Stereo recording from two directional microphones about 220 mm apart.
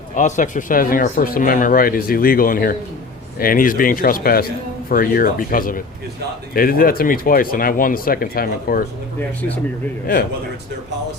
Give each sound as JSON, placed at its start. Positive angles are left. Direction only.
{"t": 0.2, "sound": "speech", "side_deg": 35}